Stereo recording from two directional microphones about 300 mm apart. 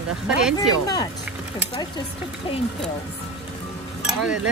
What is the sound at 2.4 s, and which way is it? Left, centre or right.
Speech, centre.